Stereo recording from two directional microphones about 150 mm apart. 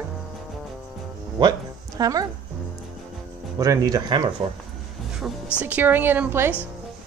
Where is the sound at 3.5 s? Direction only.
25° right (ahead or behind).